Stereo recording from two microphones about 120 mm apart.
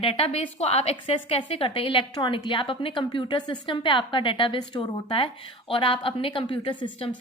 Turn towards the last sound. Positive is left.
turn(degrees=40)  # may be behind; listen again after turning